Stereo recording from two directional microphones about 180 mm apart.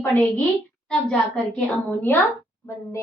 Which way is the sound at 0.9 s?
5° left (ahead or behind).